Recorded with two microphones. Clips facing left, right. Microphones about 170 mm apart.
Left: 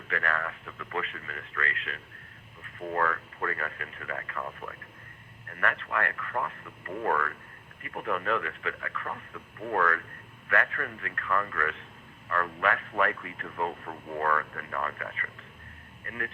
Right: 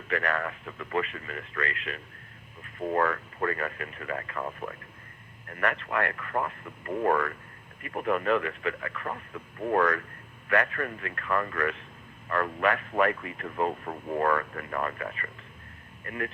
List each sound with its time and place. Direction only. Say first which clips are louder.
0.1 s a man's voice: right 3 dB; 20° right (ahead or behind)
10.5 s a man's voice: right 3 dB; 15° right (ahead or behind)